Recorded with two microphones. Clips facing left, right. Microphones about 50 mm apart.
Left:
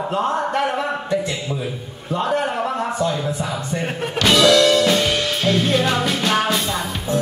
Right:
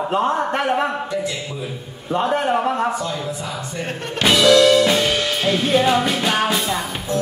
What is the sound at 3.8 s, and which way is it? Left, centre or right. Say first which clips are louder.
Speech: left 3 dB; centre.